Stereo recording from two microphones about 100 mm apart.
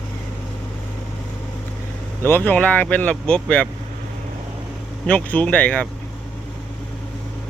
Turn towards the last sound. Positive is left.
turn(degrees=15)  # may be behind; listen again after turning